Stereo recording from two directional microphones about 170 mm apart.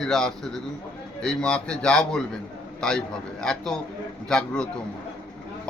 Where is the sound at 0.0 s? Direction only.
5° left (ahead or behind).